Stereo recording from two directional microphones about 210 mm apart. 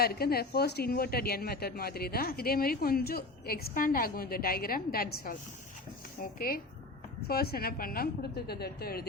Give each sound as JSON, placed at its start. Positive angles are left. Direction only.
{"t": 0.0, "sound": "speech", "side_deg": 45}
{"t": 7.3, "sound": "speech", "side_deg": 45}